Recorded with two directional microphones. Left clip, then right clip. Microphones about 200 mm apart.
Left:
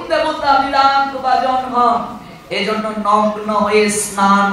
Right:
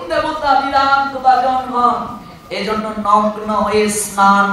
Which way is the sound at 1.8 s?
25° right (ahead or behind).